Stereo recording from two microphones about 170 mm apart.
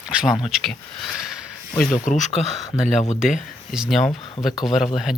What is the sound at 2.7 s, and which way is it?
Speech, 40° left (ahead or behind).